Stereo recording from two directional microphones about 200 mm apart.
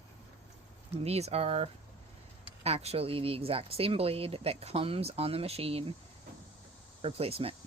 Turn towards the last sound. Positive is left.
turn(degrees=-30)  # may be behind; listen again after turning